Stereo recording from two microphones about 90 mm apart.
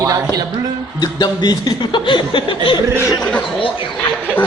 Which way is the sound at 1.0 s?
50° left (ahead or behind).